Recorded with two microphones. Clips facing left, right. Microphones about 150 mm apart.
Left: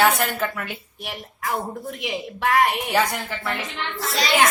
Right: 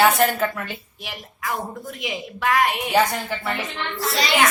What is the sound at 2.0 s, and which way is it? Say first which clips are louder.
Speech: even; 65° left (ahead or behind).